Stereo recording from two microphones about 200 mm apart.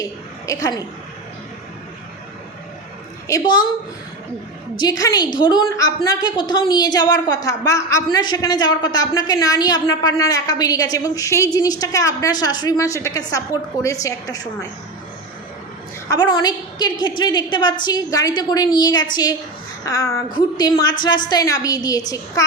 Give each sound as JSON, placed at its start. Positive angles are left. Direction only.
{"t": 0.4, "sound": "a woman's voice", "side_deg": 15}
{"t": 3.2, "sound": "a woman's voice", "side_deg": 20}
{"t": 4.8, "sound": "a woman's voice", "side_deg": 20}
{"t": 16.0, "sound": "a woman's voice", "side_deg": 20}